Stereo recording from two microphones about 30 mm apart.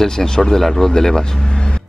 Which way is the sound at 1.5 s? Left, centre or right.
Left.